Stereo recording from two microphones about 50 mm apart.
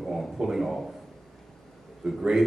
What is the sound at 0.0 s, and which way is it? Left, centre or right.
Speech, centre.